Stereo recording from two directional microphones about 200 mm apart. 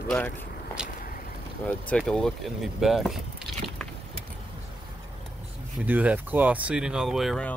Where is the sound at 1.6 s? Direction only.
5° left (ahead or behind).